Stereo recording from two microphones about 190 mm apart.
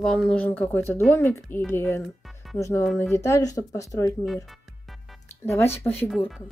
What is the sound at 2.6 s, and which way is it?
Speech, 15° left (ahead or behind).